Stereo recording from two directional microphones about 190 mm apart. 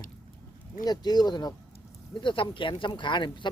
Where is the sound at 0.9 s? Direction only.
20° left (ahead or behind).